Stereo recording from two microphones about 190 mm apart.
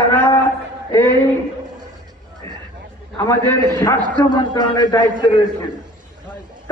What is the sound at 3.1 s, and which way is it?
A man's voice, 15° left (ahead or behind).